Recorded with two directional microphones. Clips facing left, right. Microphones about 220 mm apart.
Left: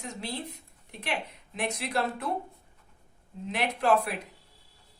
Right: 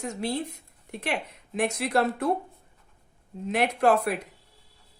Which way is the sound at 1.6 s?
45° right (ahead or behind).